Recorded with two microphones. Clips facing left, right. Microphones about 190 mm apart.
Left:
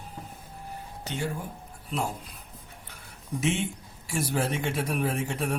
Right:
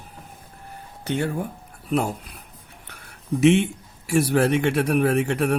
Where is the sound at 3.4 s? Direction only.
70° right (ahead or behind).